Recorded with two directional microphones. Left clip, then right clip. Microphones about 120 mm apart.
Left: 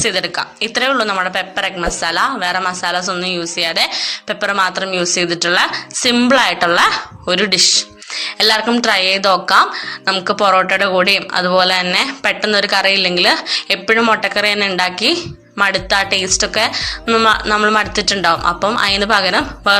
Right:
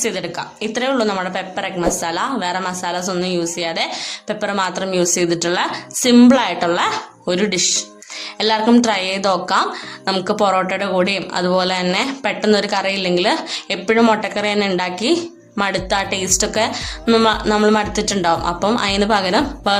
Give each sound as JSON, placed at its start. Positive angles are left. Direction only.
{"t": 0.0, "sound": "a woman's voice", "side_deg": 35}
{"t": 7.6, "sound": "a woman's voice", "side_deg": 40}